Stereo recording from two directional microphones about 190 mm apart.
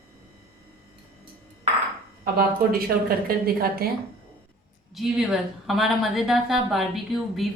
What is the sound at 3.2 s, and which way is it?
Speech, 55° right (ahead or behind).